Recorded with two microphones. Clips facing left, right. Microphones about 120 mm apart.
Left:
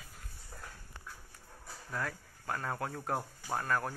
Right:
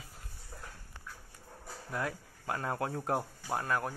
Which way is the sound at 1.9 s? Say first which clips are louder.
Right 2 dB; 15° right (ahead or behind).